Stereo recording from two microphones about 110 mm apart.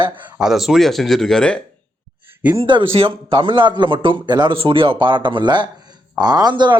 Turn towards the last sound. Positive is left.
turn(degrees=-40)  # may be behind; listen again after turning